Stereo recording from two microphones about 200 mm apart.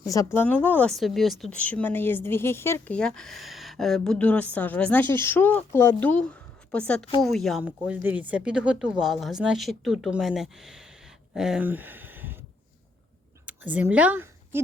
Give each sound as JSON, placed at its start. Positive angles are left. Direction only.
{"t": 0.0, "sound": "speech", "side_deg": 15}
{"t": 13.4, "sound": "speech", "side_deg": -5}